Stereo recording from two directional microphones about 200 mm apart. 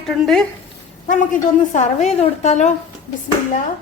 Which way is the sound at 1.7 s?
35° left (ahead or behind).